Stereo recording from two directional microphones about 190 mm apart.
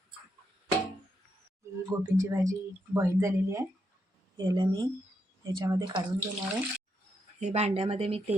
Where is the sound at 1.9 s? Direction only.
15° right (ahead or behind).